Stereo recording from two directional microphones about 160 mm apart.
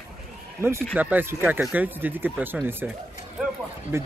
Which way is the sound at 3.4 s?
5° right (ahead or behind).